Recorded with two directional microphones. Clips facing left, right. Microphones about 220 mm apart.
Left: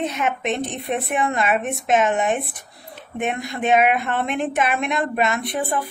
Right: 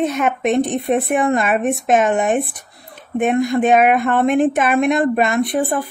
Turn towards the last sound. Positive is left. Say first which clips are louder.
# right 6 dB
turn(degrees=-50)  # may be behind; listen again after turning